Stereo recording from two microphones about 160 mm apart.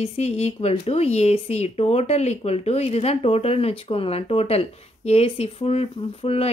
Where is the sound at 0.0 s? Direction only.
40° left (ahead or behind).